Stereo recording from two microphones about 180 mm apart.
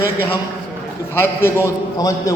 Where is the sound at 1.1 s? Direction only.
15° left (ahead or behind).